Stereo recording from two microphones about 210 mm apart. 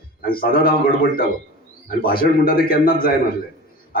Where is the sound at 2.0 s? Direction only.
45° left (ahead or behind).